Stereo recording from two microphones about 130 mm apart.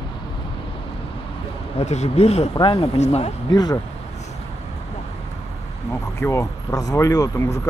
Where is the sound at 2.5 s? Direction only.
35° left (ahead or behind).